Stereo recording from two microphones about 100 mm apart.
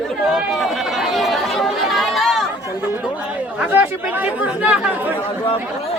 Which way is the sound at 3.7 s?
15° right (ahead or behind).